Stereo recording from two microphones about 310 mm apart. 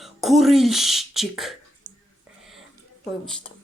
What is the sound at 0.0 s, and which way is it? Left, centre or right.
Speech, centre.